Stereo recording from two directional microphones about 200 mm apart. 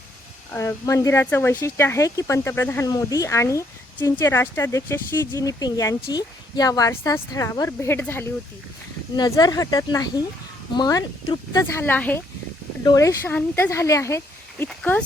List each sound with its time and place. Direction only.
0.5 s speech: 15° left (ahead or behind)